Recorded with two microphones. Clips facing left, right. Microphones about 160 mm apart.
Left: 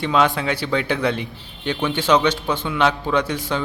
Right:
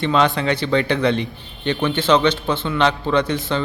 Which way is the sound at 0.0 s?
5° left (ahead or behind).